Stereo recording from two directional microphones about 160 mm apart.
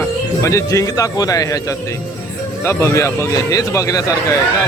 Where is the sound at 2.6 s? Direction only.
15° left (ahead or behind).